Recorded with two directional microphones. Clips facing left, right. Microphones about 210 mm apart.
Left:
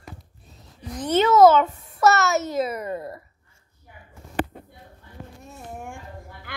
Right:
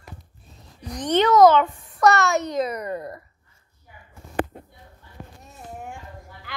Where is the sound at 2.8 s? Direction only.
25° left (ahead or behind).